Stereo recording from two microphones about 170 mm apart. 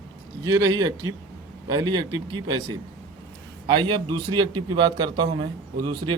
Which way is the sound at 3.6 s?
30° right (ahead or behind).